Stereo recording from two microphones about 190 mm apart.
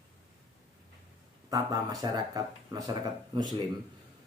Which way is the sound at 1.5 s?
20° right (ahead or behind).